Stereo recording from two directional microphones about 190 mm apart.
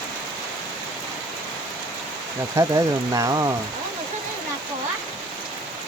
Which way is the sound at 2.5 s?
20° right (ahead or behind).